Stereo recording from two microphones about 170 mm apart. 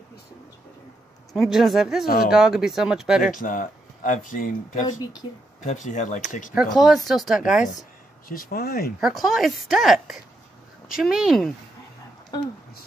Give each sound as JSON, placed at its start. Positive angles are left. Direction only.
{"t": 1.3, "sound": "speech", "side_deg": 0}
{"t": 2.0, "sound": "speech", "side_deg": 60}
{"t": 2.3, "sound": "speech", "side_deg": -5}
{"t": 3.3, "sound": "speech", "side_deg": 50}
{"t": 6.5, "sound": "speech", "side_deg": 0}
{"t": 8.3, "sound": "speech", "side_deg": 60}
{"t": 9.0, "sound": "speech", "side_deg": 0}